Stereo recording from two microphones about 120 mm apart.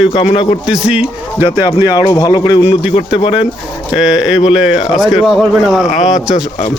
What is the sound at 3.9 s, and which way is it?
Speech, 5° right (ahead or behind).